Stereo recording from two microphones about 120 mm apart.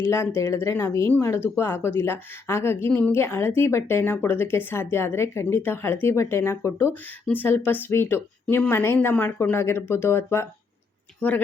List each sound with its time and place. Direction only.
0.0 s a woman's voice: 20° left (ahead or behind)